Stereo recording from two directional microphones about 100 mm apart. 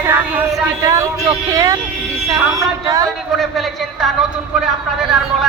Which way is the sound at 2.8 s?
40° right (ahead or behind).